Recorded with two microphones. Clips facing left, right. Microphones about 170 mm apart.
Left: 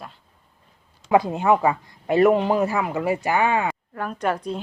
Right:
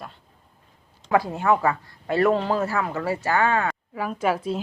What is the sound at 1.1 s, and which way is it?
A woman's voice, 20° left (ahead or behind).